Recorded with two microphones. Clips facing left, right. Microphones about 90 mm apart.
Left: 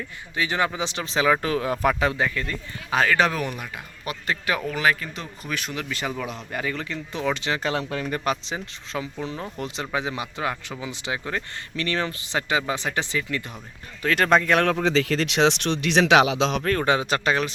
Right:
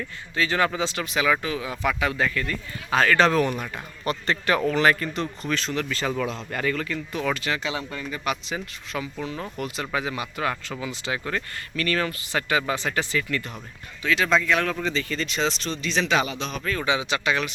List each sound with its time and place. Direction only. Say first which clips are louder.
0.3 s speech: right 1 dB; 20° left (ahead or behind); by 2.0 s 40° left (ahead or behind)
2.0 s speech: left 1 dB; 20° left (ahead or behind)
7.6 s speech: left 4 dB; 50° left (ahead or behind)
7.9 s speech: left 5 dB; 65° left (ahead or behind)
8.2 s speech: left 2 dB; 35° left (ahead or behind)
14.0 s speech: left 2 dB; 50° left (ahead or behind); by 16.6 s 90° left
16.6 s speech: left 3 dB; 50° left (ahead or behind)